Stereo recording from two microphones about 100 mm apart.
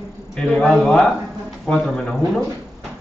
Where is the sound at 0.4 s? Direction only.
10° left (ahead or behind).